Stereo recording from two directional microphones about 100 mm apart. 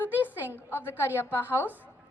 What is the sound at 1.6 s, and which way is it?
Speech, 15° right (ahead or behind).